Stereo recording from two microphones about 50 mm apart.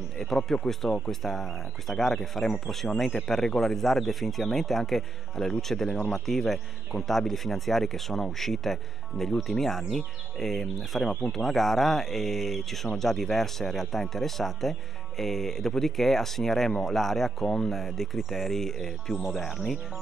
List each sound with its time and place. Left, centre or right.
0.2 s speech: centre
5.9 s speech: left
6.1 s speech: centre